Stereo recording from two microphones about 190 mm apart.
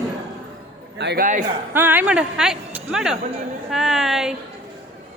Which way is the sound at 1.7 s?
10° right (ahead or behind).